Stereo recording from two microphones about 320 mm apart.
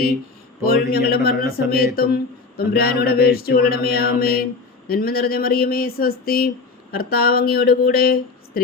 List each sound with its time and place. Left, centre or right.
0.6 s mantra: left